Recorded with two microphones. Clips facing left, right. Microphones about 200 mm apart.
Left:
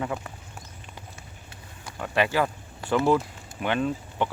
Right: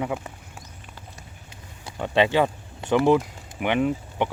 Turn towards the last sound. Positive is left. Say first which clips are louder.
# right 3 dB
turn(degrees=-15)  # may be behind; listen again after turning